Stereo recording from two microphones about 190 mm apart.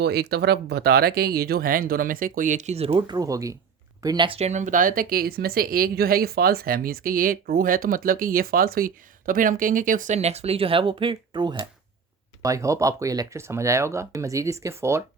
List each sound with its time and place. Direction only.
0.0 s speech: 55° right (ahead or behind); by 15.0 s 15° right (ahead or behind)